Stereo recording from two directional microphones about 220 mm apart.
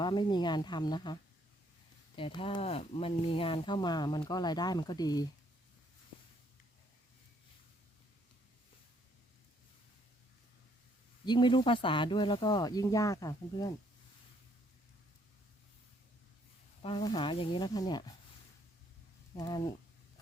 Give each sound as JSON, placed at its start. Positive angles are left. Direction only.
{"t": 0.0, "sound": "speech", "side_deg": 20}
{"t": 11.3, "sound": "speech", "side_deg": 20}
{"t": 16.8, "sound": "speech", "side_deg": 20}
{"t": 19.4, "sound": "speech", "side_deg": 20}